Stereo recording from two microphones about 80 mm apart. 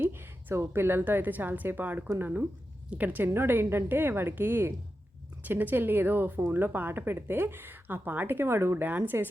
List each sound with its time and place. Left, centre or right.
0.0 s a woman's voice: right
3.2 s a woman's voice: right